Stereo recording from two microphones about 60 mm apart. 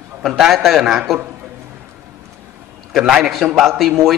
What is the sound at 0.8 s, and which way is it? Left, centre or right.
Speech, centre.